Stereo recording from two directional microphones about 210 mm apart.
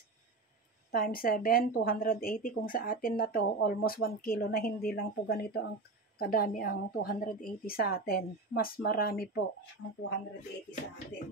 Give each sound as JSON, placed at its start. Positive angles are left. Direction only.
{"t": 0.9, "sound": "speech", "side_deg": 45}